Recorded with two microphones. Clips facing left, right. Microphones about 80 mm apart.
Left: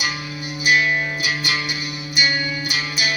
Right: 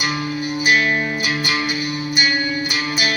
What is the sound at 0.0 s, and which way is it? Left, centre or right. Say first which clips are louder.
Music: right 5 dB; right.